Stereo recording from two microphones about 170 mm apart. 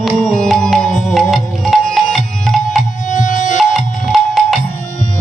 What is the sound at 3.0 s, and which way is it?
Music, 45° left (ahead or behind).